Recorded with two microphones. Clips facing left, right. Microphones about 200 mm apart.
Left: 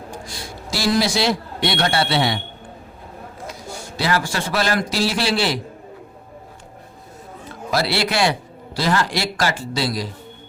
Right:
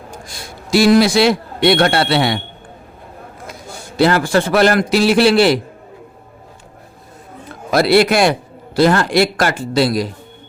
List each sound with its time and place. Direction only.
0.1 s a man's voice: 55° right (ahead or behind)
3.9 s a man's voice: 60° right (ahead or behind)
7.7 s a man's voice: 50° right (ahead or behind)